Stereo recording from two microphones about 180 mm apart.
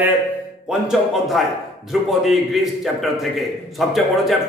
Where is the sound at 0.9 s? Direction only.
Centre (ahead or behind).